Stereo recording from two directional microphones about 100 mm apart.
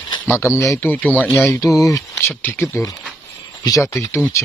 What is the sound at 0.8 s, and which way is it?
Speech, 15° left (ahead or behind).